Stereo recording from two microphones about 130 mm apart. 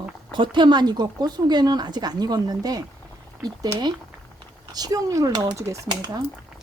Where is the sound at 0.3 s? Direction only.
40° right (ahead or behind).